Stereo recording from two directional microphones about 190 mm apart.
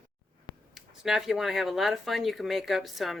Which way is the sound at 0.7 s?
Centre (ahead or behind).